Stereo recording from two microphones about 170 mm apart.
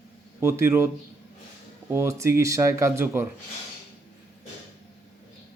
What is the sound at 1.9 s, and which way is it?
Speech, 15° right (ahead or behind).